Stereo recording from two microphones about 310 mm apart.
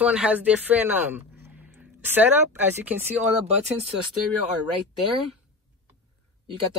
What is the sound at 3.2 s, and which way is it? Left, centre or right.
Speech, right.